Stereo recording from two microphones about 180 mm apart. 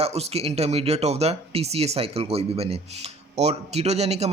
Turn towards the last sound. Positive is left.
turn(degrees=-35)  # may be behind; listen again after turning